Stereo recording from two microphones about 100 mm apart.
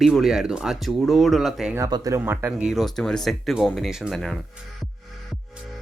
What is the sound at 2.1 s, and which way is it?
Speech, 20° right (ahead or behind).